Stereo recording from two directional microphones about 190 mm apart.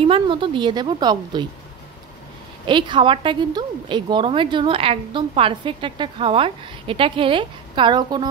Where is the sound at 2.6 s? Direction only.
25° right (ahead or behind).